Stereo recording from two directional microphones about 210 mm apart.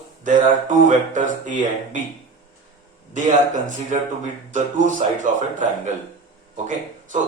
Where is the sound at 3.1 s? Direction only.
35° right (ahead or behind).